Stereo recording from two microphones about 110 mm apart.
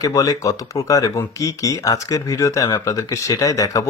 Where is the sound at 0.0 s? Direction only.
30° left (ahead or behind).